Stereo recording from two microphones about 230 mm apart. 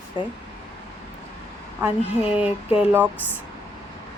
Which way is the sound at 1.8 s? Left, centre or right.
Centre.